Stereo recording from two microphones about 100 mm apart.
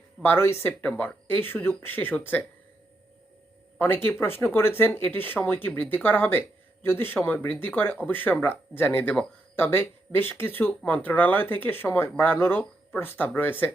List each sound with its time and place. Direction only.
0.2 s speech: 25° left (ahead or behind)
3.8 s speech: 20° left (ahead or behind)